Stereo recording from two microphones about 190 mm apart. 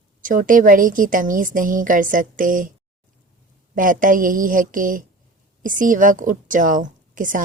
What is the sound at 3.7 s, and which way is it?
Speech, 45° right (ahead or behind).